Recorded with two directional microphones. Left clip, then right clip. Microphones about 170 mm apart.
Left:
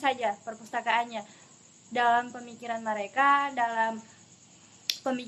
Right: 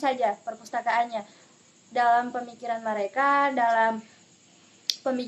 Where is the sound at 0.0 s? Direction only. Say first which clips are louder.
Right 3 dB; 15° right (ahead or behind).